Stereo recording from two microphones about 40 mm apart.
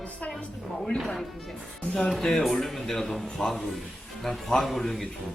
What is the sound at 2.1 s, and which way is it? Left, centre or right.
A woman's voice, centre.